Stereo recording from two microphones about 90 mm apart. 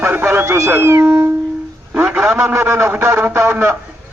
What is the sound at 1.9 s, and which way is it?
Speech, 15° right (ahead or behind).